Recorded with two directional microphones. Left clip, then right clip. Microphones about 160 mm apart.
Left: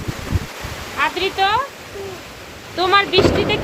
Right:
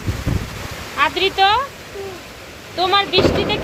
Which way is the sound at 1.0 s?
15° right (ahead or behind).